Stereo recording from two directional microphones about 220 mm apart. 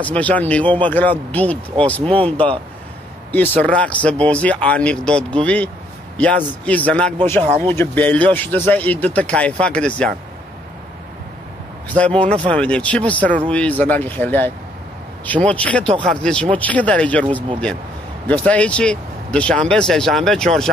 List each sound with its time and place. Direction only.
0.0 s speech: 5° left (ahead or behind)
11.9 s speech: 5° left (ahead or behind)
15.9 s speech: 30° right (ahead or behind)
16.2 s speech: 5° left (ahead or behind)